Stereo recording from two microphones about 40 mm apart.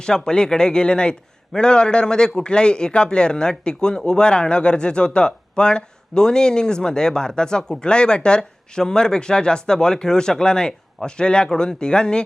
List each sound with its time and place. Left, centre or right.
0.0 s a man's voice: centre